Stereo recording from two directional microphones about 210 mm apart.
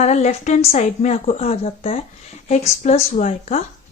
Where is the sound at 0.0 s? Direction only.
30° left (ahead or behind).